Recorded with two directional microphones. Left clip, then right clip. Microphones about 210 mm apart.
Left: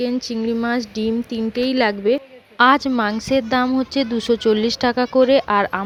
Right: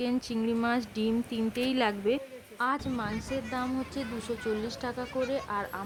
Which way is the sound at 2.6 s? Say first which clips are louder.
Left 16 dB; 35° left (ahead or behind).